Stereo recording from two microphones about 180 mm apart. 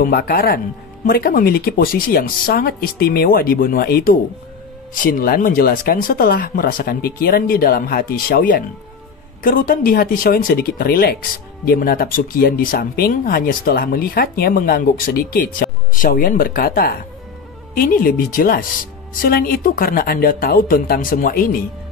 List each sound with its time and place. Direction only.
0.0 s speech: 55° left (ahead or behind)